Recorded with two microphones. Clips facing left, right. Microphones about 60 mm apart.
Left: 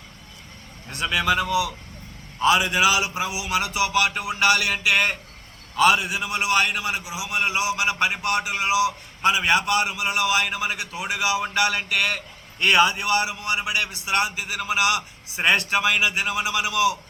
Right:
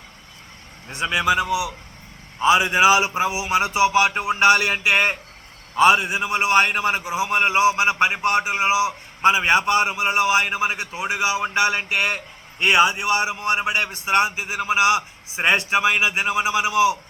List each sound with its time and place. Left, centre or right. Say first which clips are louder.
0.9 s a man's voice: right 2 dB; right